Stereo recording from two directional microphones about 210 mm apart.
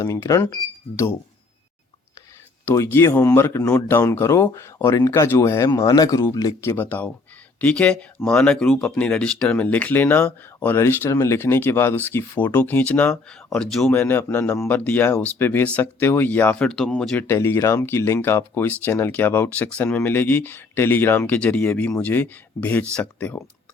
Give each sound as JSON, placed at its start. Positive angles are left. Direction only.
{"t": 0.0, "sound": "speech", "side_deg": 15}
{"t": 2.6, "sound": "speech", "side_deg": 15}